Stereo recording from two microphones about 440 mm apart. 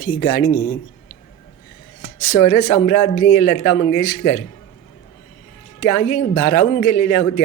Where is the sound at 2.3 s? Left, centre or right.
Centre.